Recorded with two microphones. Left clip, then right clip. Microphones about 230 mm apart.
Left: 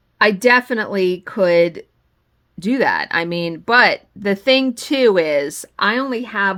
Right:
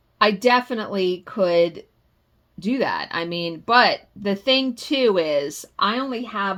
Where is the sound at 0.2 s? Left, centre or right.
Left.